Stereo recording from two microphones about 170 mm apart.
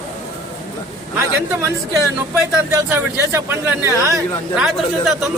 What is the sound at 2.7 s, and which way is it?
Speech, 15° right (ahead or behind).